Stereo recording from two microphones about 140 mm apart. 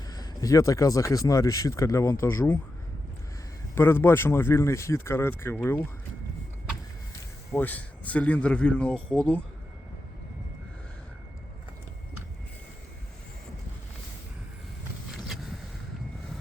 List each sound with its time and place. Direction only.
0.1 s speech: 25° left (ahead or behind)
3.8 s speech: 15° left (ahead or behind)
7.5 s speech: 10° left (ahead or behind)
15.1 s vehicle: centre (ahead or behind)